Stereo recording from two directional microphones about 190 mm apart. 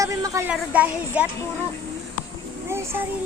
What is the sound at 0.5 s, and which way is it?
Speech, 5° right (ahead or behind).